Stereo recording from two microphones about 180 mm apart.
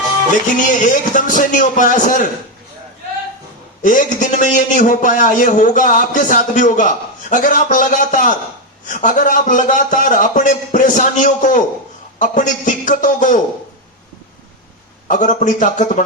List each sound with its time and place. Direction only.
0.7 s a man's voice: 45° left (ahead or behind)
3.8 s a man's voice: 45° left (ahead or behind)
15.0 s a man's voice: 45° left (ahead or behind)